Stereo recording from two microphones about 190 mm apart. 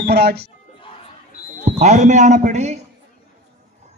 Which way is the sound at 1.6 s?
40° right (ahead or behind).